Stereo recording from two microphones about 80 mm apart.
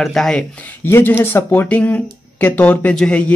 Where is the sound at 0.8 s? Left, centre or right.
Left.